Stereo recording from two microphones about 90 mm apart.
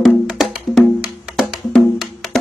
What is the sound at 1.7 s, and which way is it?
Wood block, centre (ahead or behind).